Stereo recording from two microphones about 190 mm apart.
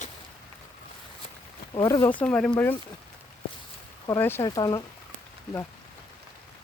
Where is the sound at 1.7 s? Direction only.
20° left (ahead or behind).